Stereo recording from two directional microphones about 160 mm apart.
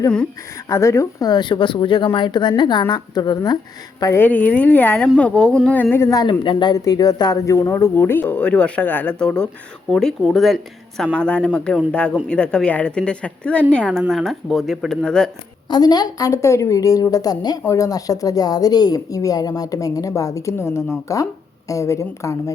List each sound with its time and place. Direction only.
0.7 s speech: 20° left (ahead or behind)
15.7 s speech: 25° left (ahead or behind)